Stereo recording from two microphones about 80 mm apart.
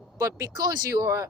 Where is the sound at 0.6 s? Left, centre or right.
Right.